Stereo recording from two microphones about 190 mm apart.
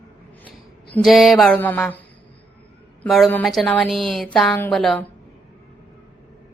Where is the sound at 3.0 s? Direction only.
Centre (ahead or behind).